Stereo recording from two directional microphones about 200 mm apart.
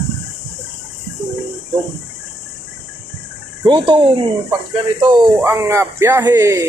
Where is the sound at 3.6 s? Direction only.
25° right (ahead or behind).